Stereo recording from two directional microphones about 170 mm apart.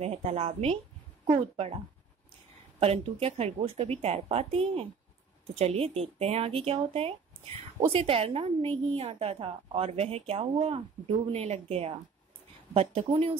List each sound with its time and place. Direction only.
0.0 s a woman's voice: 40° right (ahead or behind)
2.8 s a woman's voice: 35° right (ahead or behind)